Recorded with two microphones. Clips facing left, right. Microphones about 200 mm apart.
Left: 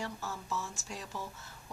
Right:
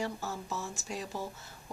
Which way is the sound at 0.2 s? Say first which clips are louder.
Right 1 dB; 35° right (ahead or behind).